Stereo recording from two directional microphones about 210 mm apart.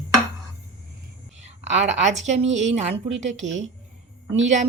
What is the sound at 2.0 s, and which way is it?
Speech, 35° right (ahead or behind).